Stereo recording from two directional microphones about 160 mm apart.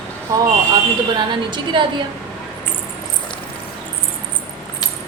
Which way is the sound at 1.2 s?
30° right (ahead or behind).